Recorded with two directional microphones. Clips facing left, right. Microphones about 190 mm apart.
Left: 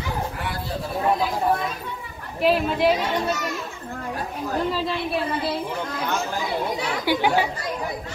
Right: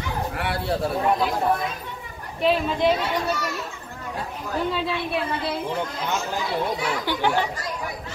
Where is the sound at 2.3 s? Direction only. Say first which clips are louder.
Left 1 dB; 5° left (ahead or behind).